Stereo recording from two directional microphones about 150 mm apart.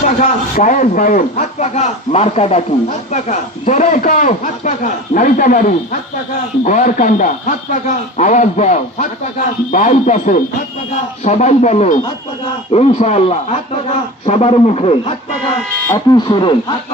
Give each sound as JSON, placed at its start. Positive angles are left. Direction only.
{"t": 0.0, "sound": "a man's voice", "side_deg": 60}
{"t": 15.9, "sound": "speech", "side_deg": 30}